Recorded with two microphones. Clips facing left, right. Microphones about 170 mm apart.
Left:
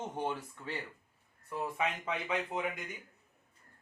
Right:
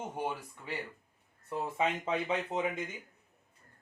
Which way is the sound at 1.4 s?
25° right (ahead or behind).